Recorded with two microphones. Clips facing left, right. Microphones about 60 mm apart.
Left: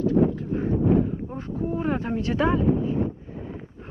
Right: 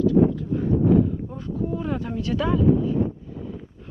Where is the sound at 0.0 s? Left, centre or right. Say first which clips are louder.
Right 3 dB; left.